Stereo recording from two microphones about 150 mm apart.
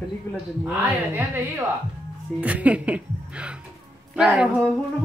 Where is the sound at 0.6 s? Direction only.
15° right (ahead or behind).